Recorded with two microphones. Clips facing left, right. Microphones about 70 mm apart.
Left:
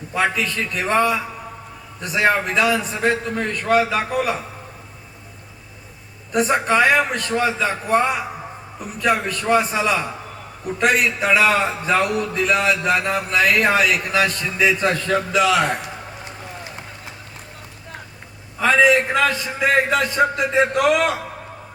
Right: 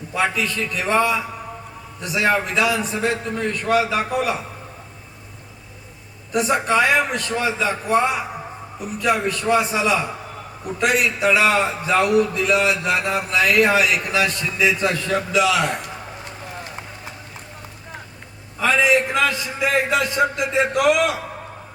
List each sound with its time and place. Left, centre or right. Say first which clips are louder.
0.1 s a man's voice: left 1 dB; left
6.3 s a man's voice: left 1 dB; left
18.6 s a man's voice: left 2 dB; left